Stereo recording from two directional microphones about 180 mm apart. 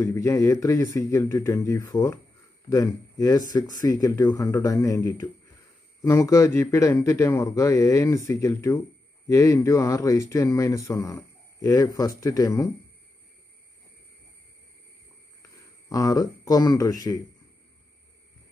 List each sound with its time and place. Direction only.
0.0 s speech: 15° left (ahead or behind)
15.9 s speech: 20° left (ahead or behind)